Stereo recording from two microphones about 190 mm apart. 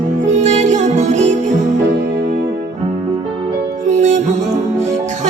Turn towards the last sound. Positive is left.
turn(degrees=-40)  # may be behind; listen again after turning